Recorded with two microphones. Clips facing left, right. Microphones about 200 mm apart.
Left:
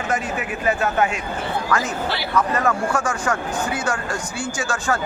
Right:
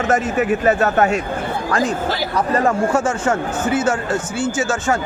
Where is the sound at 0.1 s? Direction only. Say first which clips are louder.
Right 8 dB; 45° right (ahead or behind); by 4.9 s 25° right (ahead or behind).